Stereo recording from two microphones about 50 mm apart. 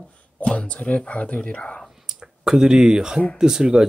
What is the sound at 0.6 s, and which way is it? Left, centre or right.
Speech, left.